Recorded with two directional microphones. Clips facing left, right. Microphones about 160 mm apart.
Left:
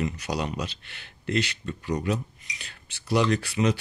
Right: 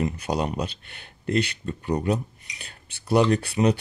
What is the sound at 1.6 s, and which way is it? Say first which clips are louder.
Speech: right 3 dB; 35° right (ahead or behind).